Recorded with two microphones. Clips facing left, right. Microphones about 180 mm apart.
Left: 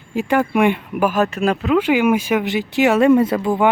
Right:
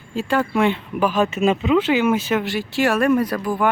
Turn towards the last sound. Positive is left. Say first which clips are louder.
# left 4 dB
turn(degrees=25)  # may be behind; listen again after turning